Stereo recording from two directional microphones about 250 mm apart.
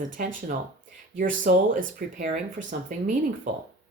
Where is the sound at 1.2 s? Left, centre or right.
Right.